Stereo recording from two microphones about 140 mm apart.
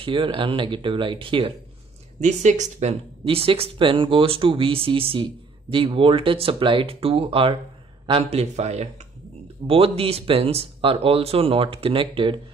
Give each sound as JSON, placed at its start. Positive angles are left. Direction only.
{"t": 0.0, "sound": "speech", "side_deg": -40}
{"t": 2.1, "sound": "speech", "side_deg": -55}